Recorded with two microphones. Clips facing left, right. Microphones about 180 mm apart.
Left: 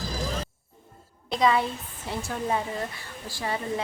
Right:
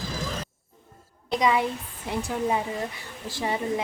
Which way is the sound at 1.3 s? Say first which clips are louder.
Even; 15° right (ahead or behind).